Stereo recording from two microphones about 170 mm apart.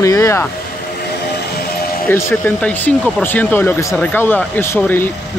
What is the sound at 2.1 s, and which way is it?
Speech, 15° left (ahead or behind).